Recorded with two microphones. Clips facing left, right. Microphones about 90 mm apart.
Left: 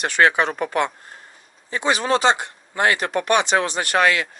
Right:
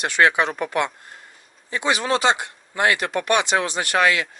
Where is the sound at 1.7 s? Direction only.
35° left (ahead or behind).